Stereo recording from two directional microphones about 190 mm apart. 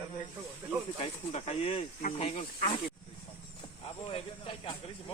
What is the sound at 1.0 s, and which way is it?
Speech, 35° left (ahead or behind).